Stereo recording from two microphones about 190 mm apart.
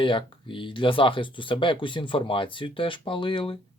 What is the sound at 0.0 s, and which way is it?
Speech, 25° left (ahead or behind).